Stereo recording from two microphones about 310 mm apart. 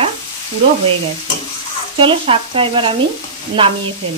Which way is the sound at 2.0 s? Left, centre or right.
Centre.